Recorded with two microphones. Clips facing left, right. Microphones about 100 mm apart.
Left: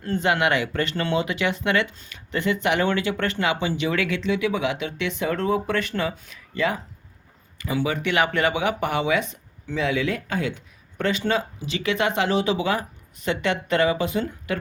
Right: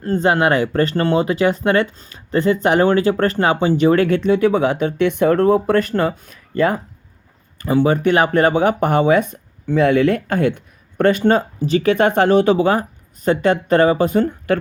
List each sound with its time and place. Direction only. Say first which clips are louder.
0.0 s speech: right 6 dB; 35° right (ahead or behind)